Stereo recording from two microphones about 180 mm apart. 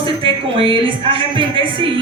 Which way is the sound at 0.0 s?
30° right (ahead or behind).